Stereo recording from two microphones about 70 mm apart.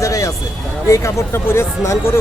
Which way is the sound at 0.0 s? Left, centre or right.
Left.